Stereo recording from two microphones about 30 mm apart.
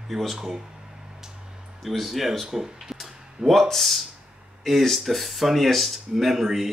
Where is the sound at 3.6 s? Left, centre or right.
Centre.